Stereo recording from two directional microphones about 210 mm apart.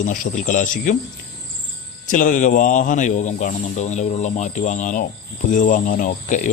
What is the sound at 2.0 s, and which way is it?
A man's voice, 40° left (ahead or behind).